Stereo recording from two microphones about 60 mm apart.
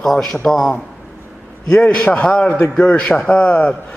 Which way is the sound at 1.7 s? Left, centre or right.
Left.